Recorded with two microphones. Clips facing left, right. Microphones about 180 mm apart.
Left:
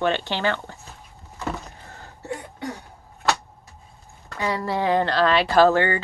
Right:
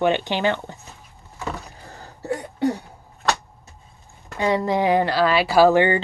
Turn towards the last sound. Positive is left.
turn(degrees=-15)  # may be behind; listen again after turning